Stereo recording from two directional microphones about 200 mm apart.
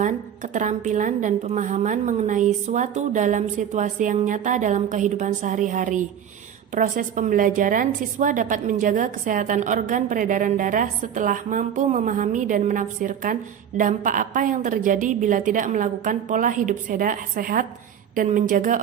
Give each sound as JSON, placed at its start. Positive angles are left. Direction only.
{"t": 0.0, "sound": "a woman's voice", "side_deg": -40}